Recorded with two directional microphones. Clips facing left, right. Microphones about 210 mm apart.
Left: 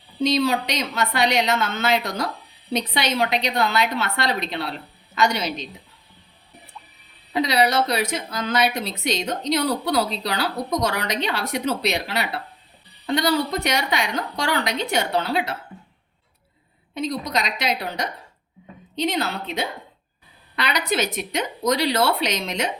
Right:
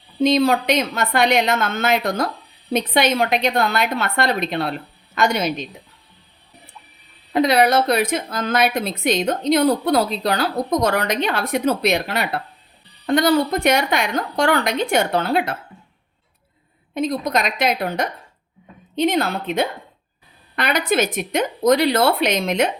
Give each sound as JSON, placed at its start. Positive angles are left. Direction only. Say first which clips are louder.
{"t": 0.2, "sound": "a woman's voice", "louder": "right 4 dB", "side_deg": -55}
{"t": 7.3, "sound": "a woman's voice", "louder": "right 4 dB", "side_deg": -55}
{"t": 16.9, "sound": "a woman's voice", "louder": "right 4 dB", "side_deg": -55}